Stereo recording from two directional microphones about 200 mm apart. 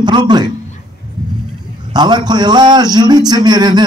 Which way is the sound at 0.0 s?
20° right (ahead or behind).